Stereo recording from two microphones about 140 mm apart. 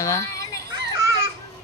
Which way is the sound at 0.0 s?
25° left (ahead or behind).